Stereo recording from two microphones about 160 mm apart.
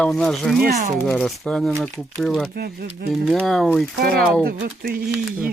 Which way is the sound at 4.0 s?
65° right (ahead or behind).